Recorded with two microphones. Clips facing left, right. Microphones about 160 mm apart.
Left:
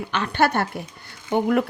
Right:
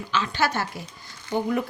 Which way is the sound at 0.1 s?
60° left (ahead or behind).